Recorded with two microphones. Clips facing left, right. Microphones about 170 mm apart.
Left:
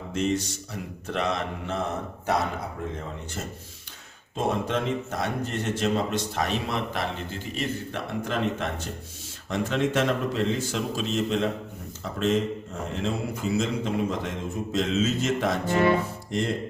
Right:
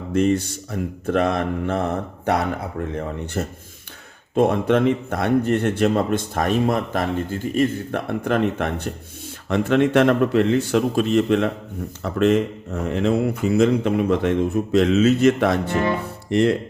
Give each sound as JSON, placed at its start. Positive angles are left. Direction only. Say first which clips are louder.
{"t": 0.1, "sound": "a man's voice", "louder": "right 7 dB", "side_deg": -55}
{"t": 3.4, "sound": "a man's voice", "louder": "right 9 dB", "side_deg": -60}